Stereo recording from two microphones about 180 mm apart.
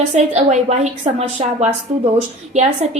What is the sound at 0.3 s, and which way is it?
A woman's voice, 40° right (ahead or behind).